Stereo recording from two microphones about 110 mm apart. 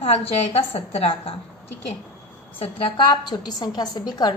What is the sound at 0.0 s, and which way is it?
A woman's voice, 65° left (ahead or behind).